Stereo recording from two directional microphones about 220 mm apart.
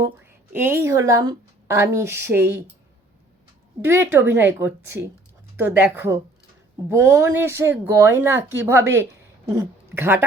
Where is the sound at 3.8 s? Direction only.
10° right (ahead or behind).